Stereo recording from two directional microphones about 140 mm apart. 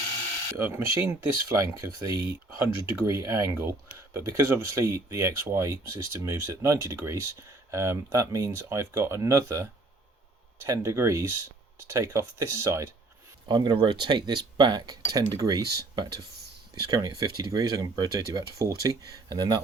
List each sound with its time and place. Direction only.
0.5 s speech: 20° right (ahead or behind)
13.5 s speech: 30° right (ahead or behind)